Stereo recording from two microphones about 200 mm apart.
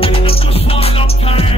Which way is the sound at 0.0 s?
30° left (ahead or behind).